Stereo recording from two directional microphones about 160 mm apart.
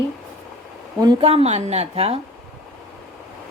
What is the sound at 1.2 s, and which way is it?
Speech, 40° right (ahead or behind).